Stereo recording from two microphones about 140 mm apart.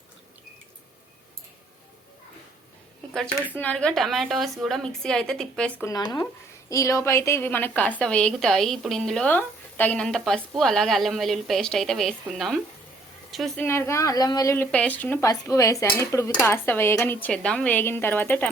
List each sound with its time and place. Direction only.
3.6 s a woman's voice: 10° left (ahead or behind)
5.8 s a woman's voice: 25° left (ahead or behind); by 12.6 s centre (ahead or behind)
13.6 s speech: 20° left (ahead or behind)
14.5 s a woman's voice: 10° left (ahead or behind)